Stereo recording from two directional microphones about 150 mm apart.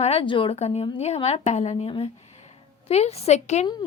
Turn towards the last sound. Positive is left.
turn(degrees=45)  # may be behind; listen again after turning